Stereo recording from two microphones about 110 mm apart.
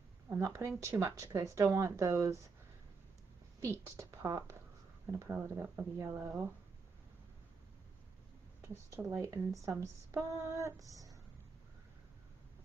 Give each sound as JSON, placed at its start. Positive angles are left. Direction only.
{"t": 0.4, "sound": "speech", "side_deg": -25}
{"t": 3.6, "sound": "speech", "side_deg": -25}
{"t": 8.5, "sound": "speech", "side_deg": -25}